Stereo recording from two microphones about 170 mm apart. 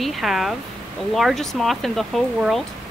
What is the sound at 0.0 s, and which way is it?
A woman's voice, centre (ahead or behind).